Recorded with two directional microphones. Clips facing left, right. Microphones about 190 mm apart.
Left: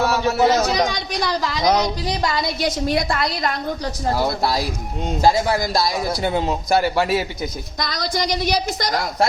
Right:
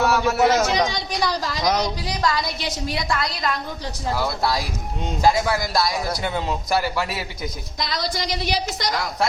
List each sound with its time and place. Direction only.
0.0 s a man's voice: 25° left (ahead or behind)
0.9 s a woman's voice: 50° left (ahead or behind)
1.6 s a man's voice: 25° left (ahead or behind)
2.6 s a woman's voice: 50° left (ahead or behind)
4.1 s a man's voice: 30° left (ahead or behind)
7.8 s a woman's voice: 45° left (ahead or behind)